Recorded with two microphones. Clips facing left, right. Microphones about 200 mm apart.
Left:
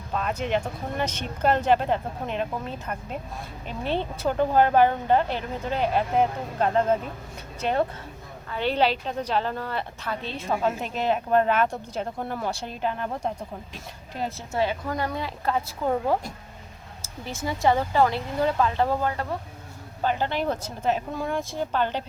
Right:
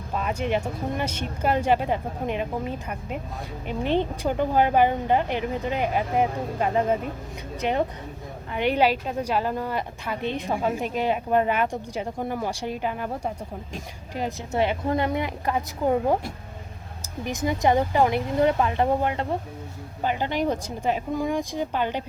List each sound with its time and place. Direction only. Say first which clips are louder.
0.1 s a woman's voice: even; 10° right (ahead or behind)